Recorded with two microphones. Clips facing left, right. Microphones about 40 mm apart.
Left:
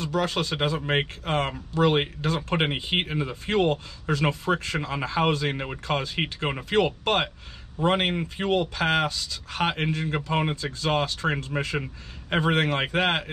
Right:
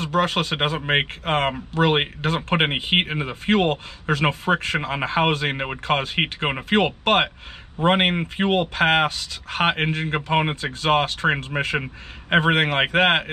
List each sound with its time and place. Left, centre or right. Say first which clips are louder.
0.0 s speech: right 4 dB; right